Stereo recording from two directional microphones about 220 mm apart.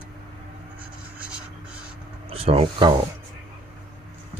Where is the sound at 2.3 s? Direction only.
25° right (ahead or behind).